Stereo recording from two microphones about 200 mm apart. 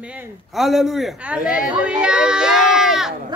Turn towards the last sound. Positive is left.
turn(degrees=0)  # may be behind; listen again after turning